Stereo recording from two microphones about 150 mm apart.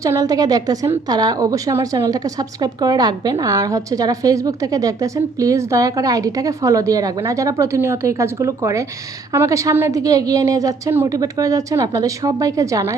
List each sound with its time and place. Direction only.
0.0 s a woman's voice: 20° right (ahead or behind)